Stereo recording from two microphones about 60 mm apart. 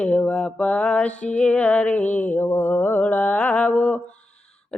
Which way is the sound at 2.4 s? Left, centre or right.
Left.